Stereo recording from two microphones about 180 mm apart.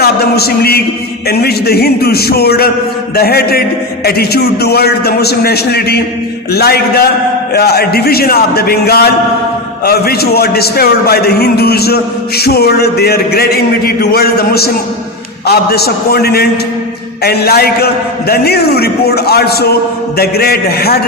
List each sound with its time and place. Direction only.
0.0 s a man's voice: 60° left (ahead or behind)